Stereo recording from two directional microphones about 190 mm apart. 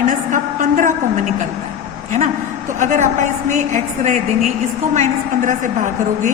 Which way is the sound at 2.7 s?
40° right (ahead or behind).